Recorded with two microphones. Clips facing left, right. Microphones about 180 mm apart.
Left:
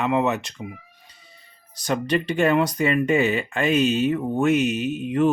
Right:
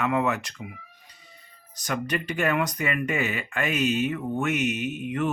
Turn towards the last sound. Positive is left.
turn(degrees=30)  # may be behind; listen again after turning